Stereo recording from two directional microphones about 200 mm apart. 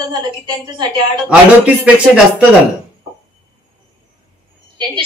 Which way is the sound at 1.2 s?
5° right (ahead or behind).